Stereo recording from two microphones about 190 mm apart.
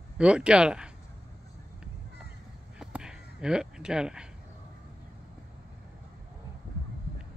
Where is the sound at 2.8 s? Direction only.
5° right (ahead or behind).